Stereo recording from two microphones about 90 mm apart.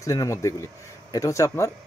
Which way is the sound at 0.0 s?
40° left (ahead or behind).